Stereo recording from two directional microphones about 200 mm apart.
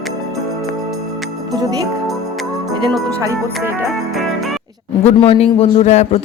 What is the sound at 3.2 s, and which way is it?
Music, 15° right (ahead or behind).